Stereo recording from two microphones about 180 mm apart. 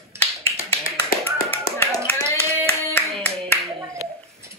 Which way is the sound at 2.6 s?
5° left (ahead or behind).